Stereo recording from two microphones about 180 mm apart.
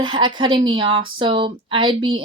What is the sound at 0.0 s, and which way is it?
A woman's voice, 25° right (ahead or behind).